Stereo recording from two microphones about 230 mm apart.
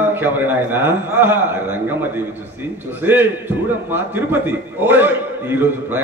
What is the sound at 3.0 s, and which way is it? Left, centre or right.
Speech, centre.